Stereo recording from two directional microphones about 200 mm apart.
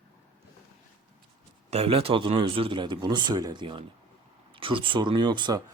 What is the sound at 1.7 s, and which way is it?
Speech, 30° right (ahead or behind).